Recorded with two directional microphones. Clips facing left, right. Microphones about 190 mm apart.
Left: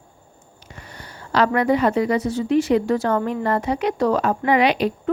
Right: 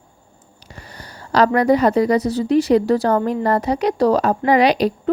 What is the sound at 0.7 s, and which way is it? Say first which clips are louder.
Speech: right 2 dB; 35° right (ahead or behind).